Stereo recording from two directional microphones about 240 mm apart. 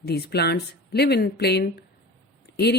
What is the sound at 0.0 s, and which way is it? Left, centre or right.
Speech, left.